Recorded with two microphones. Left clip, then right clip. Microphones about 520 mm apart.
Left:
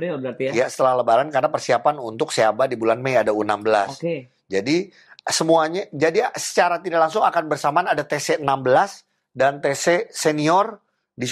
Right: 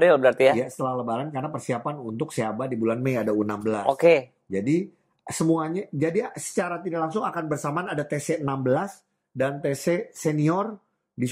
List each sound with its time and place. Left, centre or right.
0.0 s speech: right
0.6 s speech: left